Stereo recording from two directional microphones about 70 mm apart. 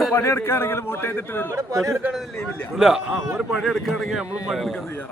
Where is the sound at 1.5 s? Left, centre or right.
Right.